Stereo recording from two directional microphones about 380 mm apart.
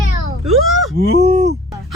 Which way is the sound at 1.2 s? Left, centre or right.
Right.